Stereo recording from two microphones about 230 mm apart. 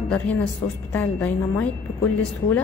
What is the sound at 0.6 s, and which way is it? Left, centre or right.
A woman's voice, centre.